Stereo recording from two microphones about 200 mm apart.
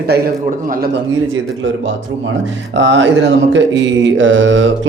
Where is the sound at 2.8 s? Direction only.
65° right (ahead or behind).